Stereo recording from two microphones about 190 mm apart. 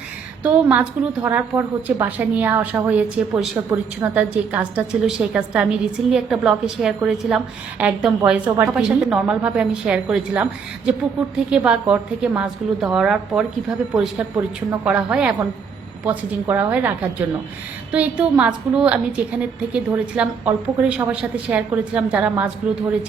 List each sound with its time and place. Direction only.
0.4 s a woman's voice: 10° right (ahead or behind)